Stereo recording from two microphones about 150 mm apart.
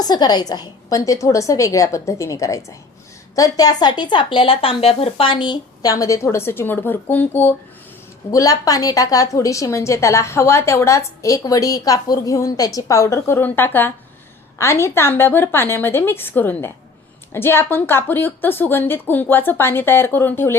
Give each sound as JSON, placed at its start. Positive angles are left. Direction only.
{"t": 0.0, "sound": "a woman's voice", "side_deg": 25}
{"t": 8.3, "sound": "a woman's voice", "side_deg": 25}